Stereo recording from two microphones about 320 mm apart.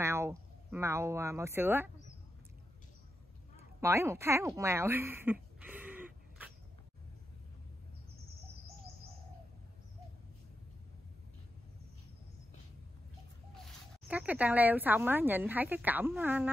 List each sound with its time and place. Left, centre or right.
0.0 s speech: centre
3.8 s speech: centre
14.0 s speech: centre